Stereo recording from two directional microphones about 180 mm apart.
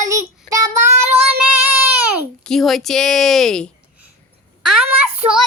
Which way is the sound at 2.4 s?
Centre (ahead or behind).